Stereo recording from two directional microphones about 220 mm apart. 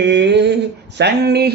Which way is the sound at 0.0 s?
55° right (ahead or behind).